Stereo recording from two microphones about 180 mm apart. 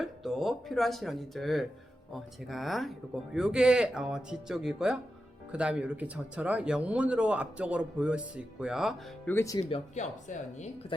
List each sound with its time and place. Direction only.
0.0 s speech: centre (ahead or behind)
9.2 s speech: 15° left (ahead or behind)
9.6 s speech: 35° left (ahead or behind)